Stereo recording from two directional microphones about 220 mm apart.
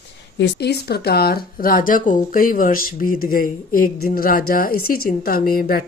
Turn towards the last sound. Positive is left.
turn(degrees=40)  # may be behind; listen again after turning